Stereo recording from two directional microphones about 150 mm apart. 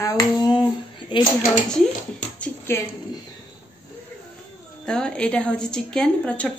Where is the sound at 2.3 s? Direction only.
10° left (ahead or behind).